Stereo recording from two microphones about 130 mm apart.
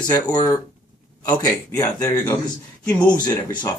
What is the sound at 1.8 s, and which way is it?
Speech, 25° left (ahead or behind).